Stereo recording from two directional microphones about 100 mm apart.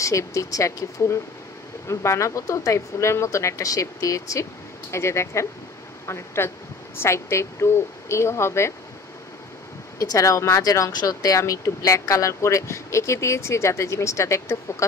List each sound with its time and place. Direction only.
0.0 s a woman's voice: 30° left (ahead or behind)
9.9 s speech: 35° left (ahead or behind)